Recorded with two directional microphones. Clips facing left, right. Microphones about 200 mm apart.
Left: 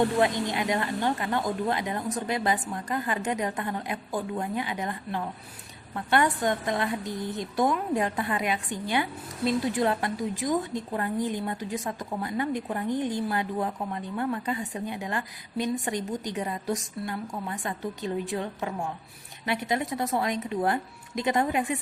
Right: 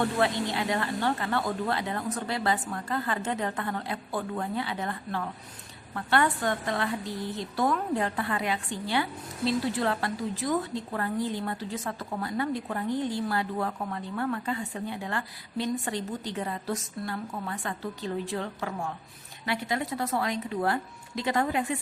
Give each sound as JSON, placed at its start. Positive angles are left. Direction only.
{"t": 0.2, "sound": "a woman's voice", "side_deg": 15}